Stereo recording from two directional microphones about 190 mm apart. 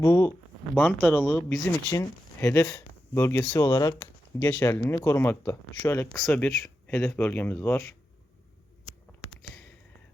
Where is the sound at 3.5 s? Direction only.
20° left (ahead or behind).